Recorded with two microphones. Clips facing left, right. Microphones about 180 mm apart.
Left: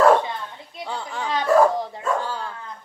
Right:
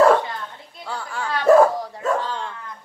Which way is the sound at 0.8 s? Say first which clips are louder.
Even; 20° left (ahead or behind).